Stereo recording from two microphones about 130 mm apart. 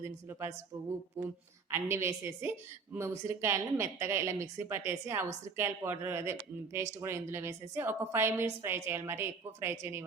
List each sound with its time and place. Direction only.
0.0 s a woman's voice: 20° right (ahead or behind)
1.7 s a woman's voice: 20° right (ahead or behind)